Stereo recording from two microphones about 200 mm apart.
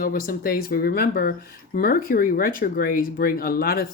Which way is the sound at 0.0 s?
45° left (ahead or behind).